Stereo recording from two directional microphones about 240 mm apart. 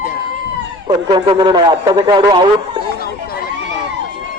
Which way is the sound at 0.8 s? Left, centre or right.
Centre.